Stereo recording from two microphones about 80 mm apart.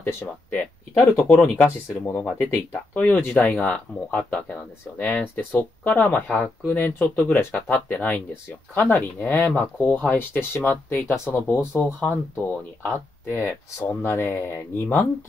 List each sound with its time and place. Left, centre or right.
0.0 s speech: left
3.5 s speech: centre